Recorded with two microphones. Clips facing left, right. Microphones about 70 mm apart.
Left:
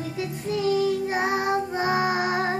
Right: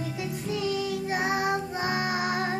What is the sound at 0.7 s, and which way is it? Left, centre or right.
Child singing, left.